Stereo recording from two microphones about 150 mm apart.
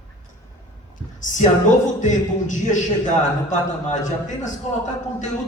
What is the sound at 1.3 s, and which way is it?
A man's voice, 55° left (ahead or behind).